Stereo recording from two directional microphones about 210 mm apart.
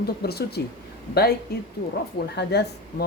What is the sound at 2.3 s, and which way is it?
Speech, 50° left (ahead or behind).